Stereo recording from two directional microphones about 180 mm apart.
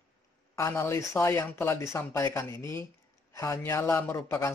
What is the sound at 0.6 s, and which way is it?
A man's voice, 15° left (ahead or behind).